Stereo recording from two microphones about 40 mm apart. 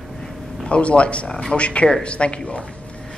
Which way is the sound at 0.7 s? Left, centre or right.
Left.